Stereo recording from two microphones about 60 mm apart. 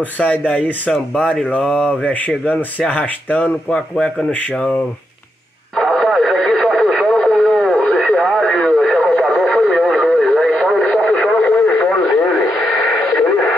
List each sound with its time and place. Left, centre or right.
0.5 s speech: left
1.2 s speech: centre
1.5 s mantra: centre
1.9 s speech: left
5.8 s radio: centre
12.6 s radio: centre